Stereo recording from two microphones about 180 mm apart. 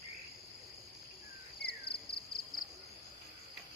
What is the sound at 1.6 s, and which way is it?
Cricket, 65° left (ahead or behind).